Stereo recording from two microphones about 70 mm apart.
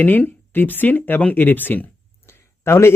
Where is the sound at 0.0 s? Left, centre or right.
Left.